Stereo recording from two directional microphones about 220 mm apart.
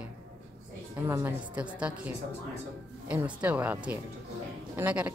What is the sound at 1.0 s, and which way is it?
Speech, 10° right (ahead or behind).